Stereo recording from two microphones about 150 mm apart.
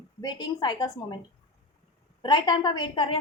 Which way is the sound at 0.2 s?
30° left (ahead or behind).